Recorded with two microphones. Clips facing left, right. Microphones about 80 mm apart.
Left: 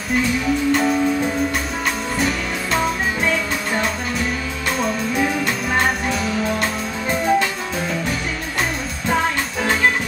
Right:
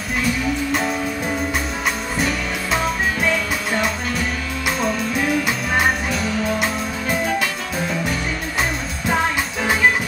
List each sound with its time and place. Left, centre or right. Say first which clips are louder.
0.7 s music: left 4 dB; centre
2.1 s music: left 1 dB; centre
5.8 s music: even; centre